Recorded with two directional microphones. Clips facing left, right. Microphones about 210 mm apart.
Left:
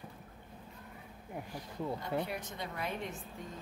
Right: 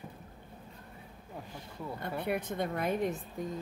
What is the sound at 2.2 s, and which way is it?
Speech, 60° right (ahead or behind).